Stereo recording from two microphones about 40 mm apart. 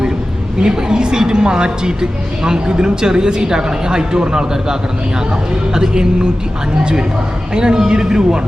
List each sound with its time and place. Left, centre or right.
0.6 s a woman's voice: centre
7.5 s a man's voice: centre